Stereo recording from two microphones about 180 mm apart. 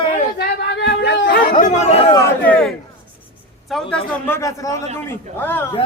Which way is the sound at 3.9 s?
5° left (ahead or behind).